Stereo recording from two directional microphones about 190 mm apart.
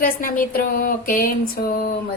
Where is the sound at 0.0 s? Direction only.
50° left (ahead or behind).